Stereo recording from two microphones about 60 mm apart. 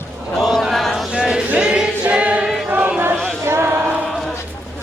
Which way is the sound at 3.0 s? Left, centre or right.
Right.